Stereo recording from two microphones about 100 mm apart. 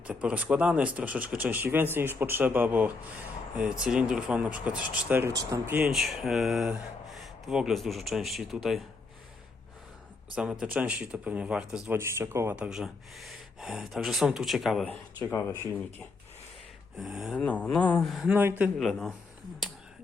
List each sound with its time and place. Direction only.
0.1 s speech: 10° right (ahead or behind)
5.3 s speech: 35° right (ahead or behind)
5.6 s speech: 15° right (ahead or behind)
5.9 s speech: 5° right (ahead or behind)
10.3 s speech: 10° right (ahead or behind)
11.9 s speech: 25° right (ahead or behind)
12.5 s speech: 10° right (ahead or behind)
17.0 s speech: 5° right (ahead or behind)
17.3 s a sound: 15° left (ahead or behind)
18.0 s speech: centre (ahead or behind)
18.3 s speech: 20° right (ahead or behind)
18.8 s speech: centre (ahead or behind)